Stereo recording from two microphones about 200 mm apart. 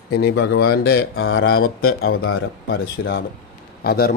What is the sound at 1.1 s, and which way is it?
Speech, 90° left.